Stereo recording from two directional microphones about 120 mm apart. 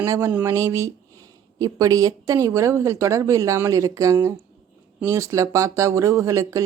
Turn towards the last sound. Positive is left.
turn(degrees=-25)  # may be behind; listen again after turning